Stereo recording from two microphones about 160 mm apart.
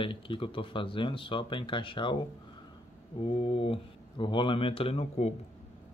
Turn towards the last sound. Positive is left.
turn(degrees=40)  # may be behind; listen again after turning